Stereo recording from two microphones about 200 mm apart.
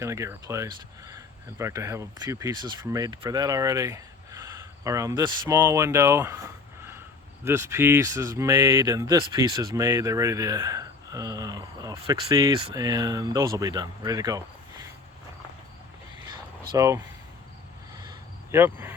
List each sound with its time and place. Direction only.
0.0 s speech: 15° right (ahead or behind)
16.7 s speech: 15° right (ahead or behind)
18.5 s speech: 10° right (ahead or behind)